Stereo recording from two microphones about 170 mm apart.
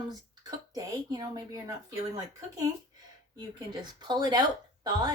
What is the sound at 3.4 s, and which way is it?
Speech, 25° right (ahead or behind).